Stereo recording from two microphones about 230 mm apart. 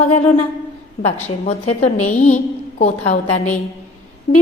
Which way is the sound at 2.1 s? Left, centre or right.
Left.